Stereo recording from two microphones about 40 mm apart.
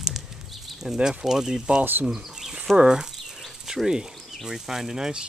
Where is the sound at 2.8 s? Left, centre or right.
Centre.